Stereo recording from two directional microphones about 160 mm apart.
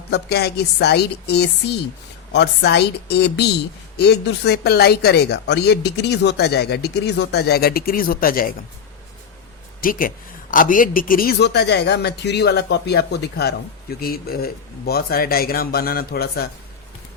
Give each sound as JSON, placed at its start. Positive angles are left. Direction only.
{"t": 0.1, "sound": "speech", "side_deg": 90}
{"t": 9.8, "sound": "speech", "side_deg": 60}
{"t": 14.0, "sound": "speech", "side_deg": 70}